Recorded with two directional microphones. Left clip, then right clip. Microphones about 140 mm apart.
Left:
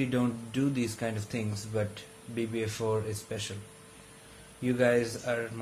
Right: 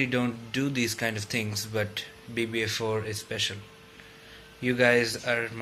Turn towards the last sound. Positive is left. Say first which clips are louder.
# right 4 dB
turn(degrees=5)  # may be behind; listen again after turning